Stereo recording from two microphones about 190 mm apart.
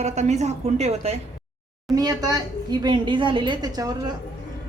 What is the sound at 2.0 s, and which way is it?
A woman's voice, 20° right (ahead or behind).